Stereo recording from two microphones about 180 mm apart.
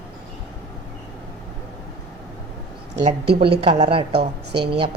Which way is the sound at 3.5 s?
30° right (ahead or behind).